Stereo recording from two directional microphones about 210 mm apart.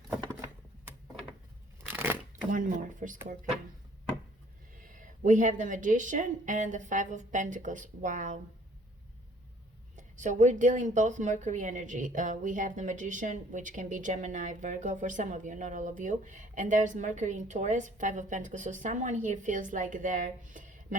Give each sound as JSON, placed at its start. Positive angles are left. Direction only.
{"t": 2.5, "sound": "a woman's voice", "side_deg": -40}
{"t": 4.8, "sound": "a woman's voice", "side_deg": -40}
{"t": 9.9, "sound": "a woman's voice", "side_deg": -35}